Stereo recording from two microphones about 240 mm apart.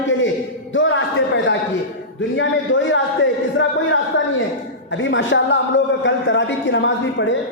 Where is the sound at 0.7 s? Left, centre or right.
Left.